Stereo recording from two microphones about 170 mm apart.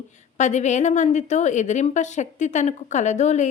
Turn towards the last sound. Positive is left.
turn(degrees=45)  # may be behind; listen again after turning